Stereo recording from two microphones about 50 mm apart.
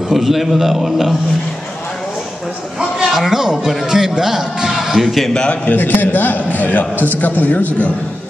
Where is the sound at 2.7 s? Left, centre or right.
Centre.